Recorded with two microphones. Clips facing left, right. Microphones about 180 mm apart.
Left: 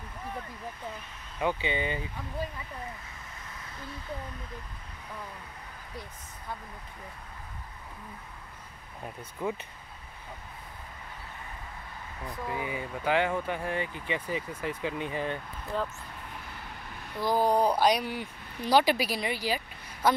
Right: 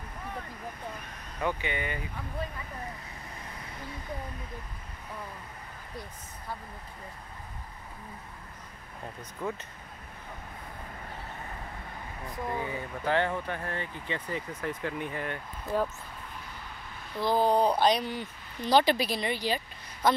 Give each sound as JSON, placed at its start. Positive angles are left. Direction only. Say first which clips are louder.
{"t": 1.4, "sound": "speech", "louder": "left 2 dB", "side_deg": 20}
{"t": 9.0, "sound": "speech", "louder": "left 2 dB", "side_deg": 15}
{"t": 12.4, "sound": "speech", "louder": "even", "side_deg": 10}
{"t": 15.7, "sound": "speech", "louder": "right 3 dB", "side_deg": -10}
{"t": 17.2, "sound": "speech", "louder": "even", "side_deg": 10}